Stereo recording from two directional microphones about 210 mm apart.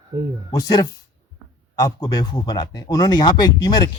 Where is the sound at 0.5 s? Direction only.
15° left (ahead or behind).